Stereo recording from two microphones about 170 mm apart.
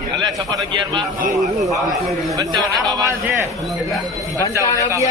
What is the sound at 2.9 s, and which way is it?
Speech, 20° right (ahead or behind).